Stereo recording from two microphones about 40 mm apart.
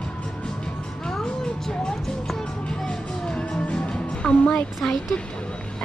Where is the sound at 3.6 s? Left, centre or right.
Left.